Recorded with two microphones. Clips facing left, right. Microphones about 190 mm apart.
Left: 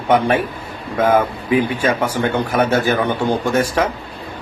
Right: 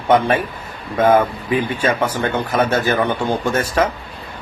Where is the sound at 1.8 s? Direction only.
10° left (ahead or behind).